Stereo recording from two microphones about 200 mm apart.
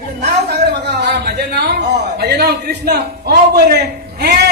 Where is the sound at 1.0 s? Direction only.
55° right (ahead or behind).